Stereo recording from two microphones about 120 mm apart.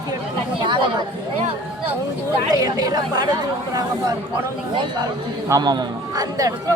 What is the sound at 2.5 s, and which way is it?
Speech, 30° right (ahead or behind).